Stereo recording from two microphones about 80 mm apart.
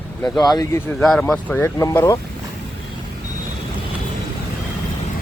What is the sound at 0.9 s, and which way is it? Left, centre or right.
Speech, centre.